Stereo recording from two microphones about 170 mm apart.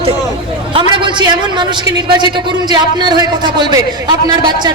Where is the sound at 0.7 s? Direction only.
30° right (ahead or behind).